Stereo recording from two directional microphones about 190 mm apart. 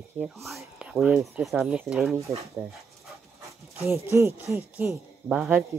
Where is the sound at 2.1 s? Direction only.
15° right (ahead or behind).